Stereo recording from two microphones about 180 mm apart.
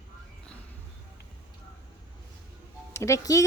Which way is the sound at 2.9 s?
15° left (ahead or behind).